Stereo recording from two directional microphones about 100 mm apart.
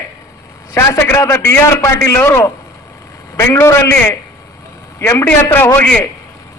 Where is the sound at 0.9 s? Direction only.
30° left (ahead or behind).